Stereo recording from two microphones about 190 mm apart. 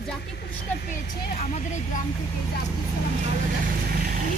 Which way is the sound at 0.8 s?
45° left (ahead or behind).